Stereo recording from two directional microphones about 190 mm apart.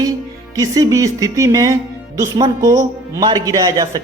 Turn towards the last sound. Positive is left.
turn(degrees=-15)  # may be behind; listen again after turning